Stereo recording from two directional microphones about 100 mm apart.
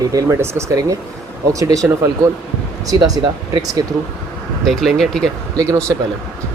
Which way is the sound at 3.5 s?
40° right (ahead or behind).